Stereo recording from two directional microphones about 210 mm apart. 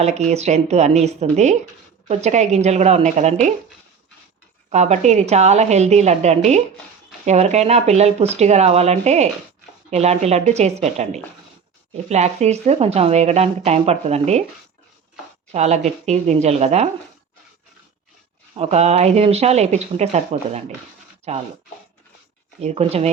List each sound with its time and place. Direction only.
0.0 s speech: 30° right (ahead or behind)
4.7 s speech: 35° right (ahead or behind)
15.5 s speech: 30° right (ahead or behind)
18.5 s speech: 30° right (ahead or behind)
22.6 s speech: 30° right (ahead or behind)